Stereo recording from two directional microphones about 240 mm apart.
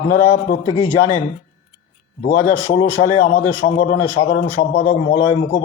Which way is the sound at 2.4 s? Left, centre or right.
Left.